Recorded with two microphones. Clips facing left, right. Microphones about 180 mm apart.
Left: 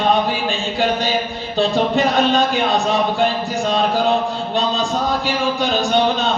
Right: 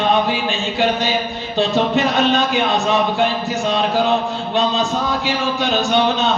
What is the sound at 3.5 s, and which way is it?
A man's voice, 35° left (ahead or behind).